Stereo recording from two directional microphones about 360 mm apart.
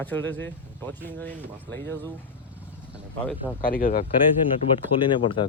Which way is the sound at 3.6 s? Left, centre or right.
Left.